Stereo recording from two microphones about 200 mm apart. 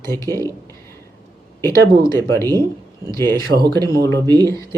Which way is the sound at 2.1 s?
15° left (ahead or behind).